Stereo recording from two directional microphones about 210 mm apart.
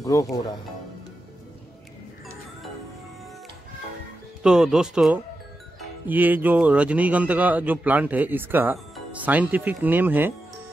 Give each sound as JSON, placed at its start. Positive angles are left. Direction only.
{"t": 0.0, "sound": "speech", "side_deg": 15}
{"t": 4.4, "sound": "a man's voice", "side_deg": -5}